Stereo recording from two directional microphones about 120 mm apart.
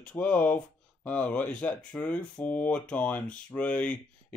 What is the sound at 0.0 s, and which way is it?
Speech, 15° left (ahead or behind).